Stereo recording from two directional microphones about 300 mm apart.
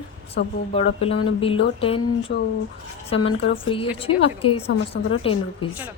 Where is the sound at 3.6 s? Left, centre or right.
Centre.